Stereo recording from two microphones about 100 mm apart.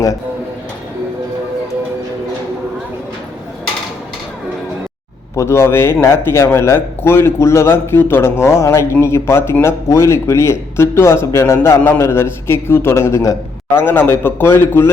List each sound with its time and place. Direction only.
5.4 s a man's voice: 25° left (ahead or behind)